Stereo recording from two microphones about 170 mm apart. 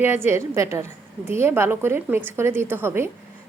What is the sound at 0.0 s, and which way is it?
A woman's voice, 15° right (ahead or behind).